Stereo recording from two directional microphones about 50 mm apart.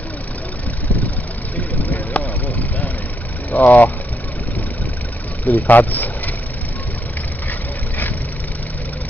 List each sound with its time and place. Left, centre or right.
1.6 s vehicle: left
3.5 s speech: left
5.4 s speech: left